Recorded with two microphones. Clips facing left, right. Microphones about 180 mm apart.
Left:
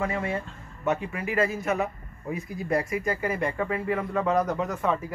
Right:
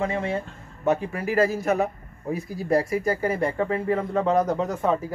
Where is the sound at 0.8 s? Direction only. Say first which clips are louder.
Right 4 dB; 35° right (ahead or behind).